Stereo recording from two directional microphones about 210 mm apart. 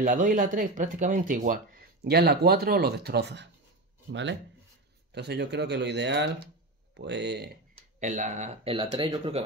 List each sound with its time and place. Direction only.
0.0 s speech: 40° right (ahead or behind)
8.0 s speech: 35° right (ahead or behind)